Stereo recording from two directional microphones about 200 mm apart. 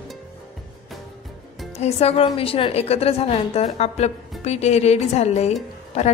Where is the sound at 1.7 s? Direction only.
30° left (ahead or behind).